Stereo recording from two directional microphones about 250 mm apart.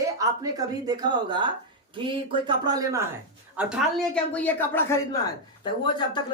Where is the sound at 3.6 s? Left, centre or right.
Centre.